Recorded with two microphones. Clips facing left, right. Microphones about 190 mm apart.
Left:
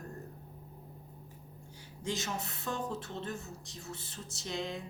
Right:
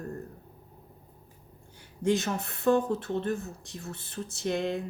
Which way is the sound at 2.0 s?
55° right (ahead or behind).